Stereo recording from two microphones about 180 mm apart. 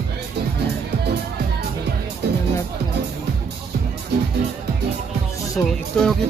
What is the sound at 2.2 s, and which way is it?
Music, 65° right (ahead or behind).